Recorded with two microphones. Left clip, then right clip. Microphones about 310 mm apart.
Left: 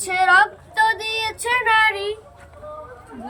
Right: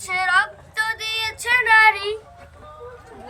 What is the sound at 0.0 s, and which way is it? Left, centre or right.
Child singing, left.